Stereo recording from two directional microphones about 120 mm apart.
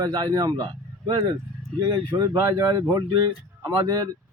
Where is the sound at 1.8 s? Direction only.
40° right (ahead or behind).